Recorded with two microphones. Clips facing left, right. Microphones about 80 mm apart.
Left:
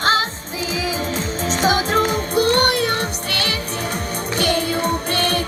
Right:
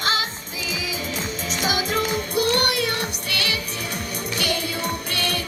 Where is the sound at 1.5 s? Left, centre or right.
Left.